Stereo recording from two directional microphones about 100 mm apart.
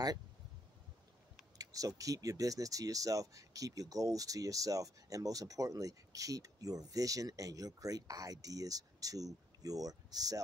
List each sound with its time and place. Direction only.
1.6 s speech: 35° right (ahead or behind)